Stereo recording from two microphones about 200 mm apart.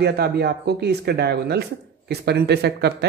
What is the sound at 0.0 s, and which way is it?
Speech, 55° right (ahead or behind).